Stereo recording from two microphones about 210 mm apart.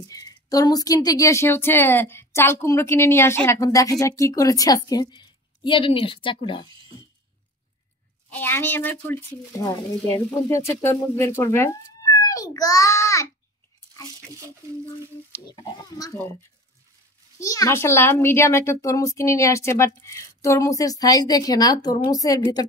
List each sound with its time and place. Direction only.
0.0 s a woman's voice: 15° left (ahead or behind)
8.3 s a woman's voice: 10° left (ahead or behind)
16.0 s a woman's voice: 10° left (ahead or behind)
17.4 s a woman's voice: 15° left (ahead or behind)